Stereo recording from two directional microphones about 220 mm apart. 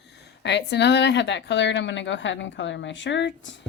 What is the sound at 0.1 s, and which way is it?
A woman's voice, 50° left (ahead or behind).